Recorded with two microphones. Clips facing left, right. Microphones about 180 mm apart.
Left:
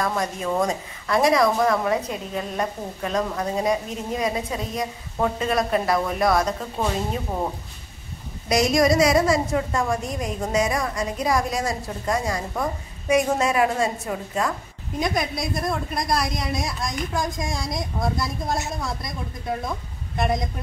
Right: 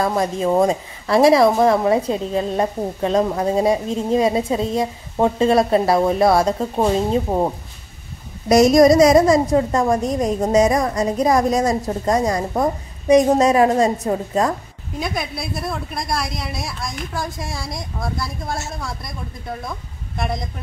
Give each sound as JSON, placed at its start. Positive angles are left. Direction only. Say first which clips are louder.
{"t": 0.0, "sound": "a woman's voice", "louder": "right 6 dB", "side_deg": -30}
{"t": 8.5, "sound": "a woman's voice", "louder": "right 8 dB", "side_deg": -45}
{"t": 15.0, "sound": "a woman's voice", "louder": "left 1 dB", "side_deg": -5}